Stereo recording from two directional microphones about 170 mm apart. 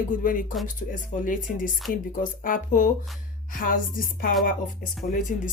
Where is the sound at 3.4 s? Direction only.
55° left (ahead or behind).